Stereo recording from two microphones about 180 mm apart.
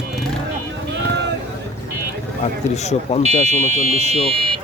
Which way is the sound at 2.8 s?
40° left (ahead or behind).